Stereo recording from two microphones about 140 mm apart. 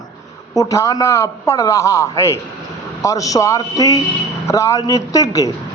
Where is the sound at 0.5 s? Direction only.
25° left (ahead or behind).